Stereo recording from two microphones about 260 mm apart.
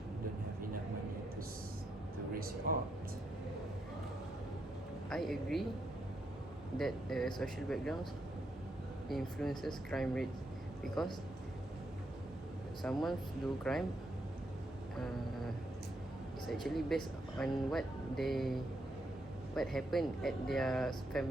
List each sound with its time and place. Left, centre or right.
2.3 s a sound: right
5.0 s speech: centre
6.7 s speech: centre
9.4 s speech: centre
12.8 s speech: centre
16.5 s speech: centre